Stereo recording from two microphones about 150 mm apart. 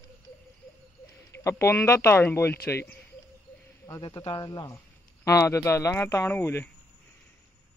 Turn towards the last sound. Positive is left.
turn(degrees=15)  # may be behind; listen again after turning